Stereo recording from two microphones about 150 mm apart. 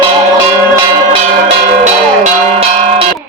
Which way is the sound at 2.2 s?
45° right (ahead or behind).